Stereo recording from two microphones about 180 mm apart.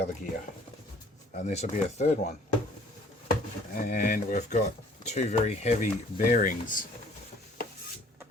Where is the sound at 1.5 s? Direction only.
40° left (ahead or behind).